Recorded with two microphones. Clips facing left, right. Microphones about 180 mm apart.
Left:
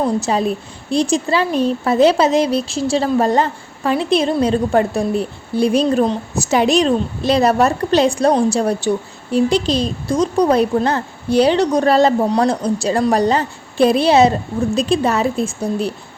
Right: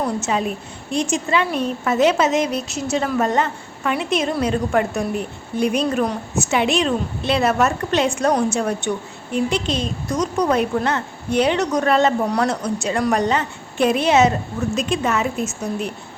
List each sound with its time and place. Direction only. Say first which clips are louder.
0.0 s a woman's voice: left 4 dB; 35° left (ahead or behind)